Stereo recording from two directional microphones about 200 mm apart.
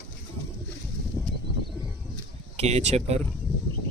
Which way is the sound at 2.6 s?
30° right (ahead or behind).